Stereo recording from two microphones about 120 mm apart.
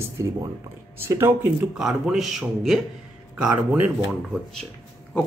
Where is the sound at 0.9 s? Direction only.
20° right (ahead or behind).